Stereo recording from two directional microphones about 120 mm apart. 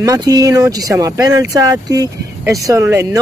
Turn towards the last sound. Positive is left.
turn(degrees=-25)  # may be behind; listen again after turning